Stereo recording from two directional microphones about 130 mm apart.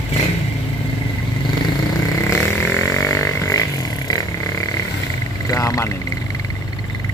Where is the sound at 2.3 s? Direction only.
20° left (ahead or behind).